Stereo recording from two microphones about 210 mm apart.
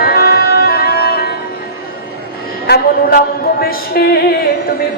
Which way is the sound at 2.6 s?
45° left (ahead or behind).